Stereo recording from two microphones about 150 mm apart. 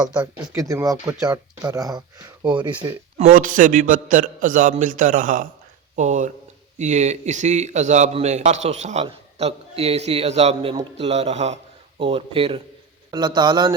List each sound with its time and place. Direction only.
0.1 s speech: 5° right (ahead or behind)
0.5 s speech: 20° right (ahead or behind)
3.2 s a man's voice: 65° right (ahead or behind); by 11.5 s 45° right (ahead or behind)
11.9 s speech: 35° right (ahead or behind)